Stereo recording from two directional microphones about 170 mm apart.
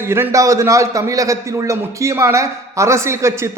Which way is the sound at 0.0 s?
15° right (ahead or behind).